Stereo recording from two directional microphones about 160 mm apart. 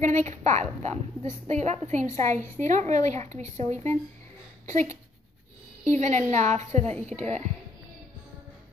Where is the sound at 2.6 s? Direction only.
50° right (ahead or behind).